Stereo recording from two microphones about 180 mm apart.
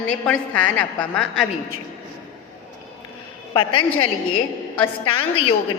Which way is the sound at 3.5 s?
25° left (ahead or behind).